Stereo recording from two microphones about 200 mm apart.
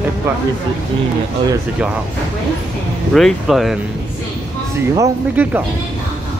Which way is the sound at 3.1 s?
Centre (ahead or behind).